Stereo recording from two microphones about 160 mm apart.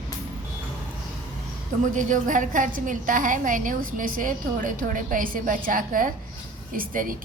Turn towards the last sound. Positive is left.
turn(degrees=-60)  # may be behind; listen again after turning